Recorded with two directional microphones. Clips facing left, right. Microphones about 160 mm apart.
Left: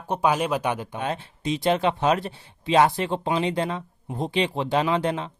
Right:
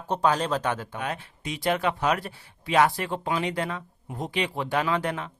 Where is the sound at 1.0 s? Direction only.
25° left (ahead or behind).